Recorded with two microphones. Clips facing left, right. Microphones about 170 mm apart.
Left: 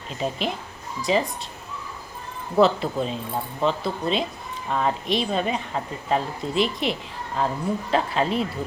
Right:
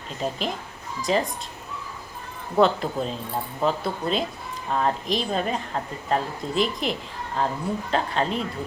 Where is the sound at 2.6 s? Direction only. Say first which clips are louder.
Left 1 dB; centre (ahead or behind).